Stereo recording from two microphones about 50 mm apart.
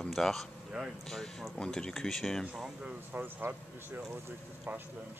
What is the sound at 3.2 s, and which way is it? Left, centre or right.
Speech, right.